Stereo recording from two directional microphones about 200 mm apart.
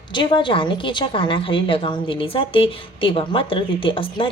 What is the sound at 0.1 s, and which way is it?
A woman's voice, 25° left (ahead or behind).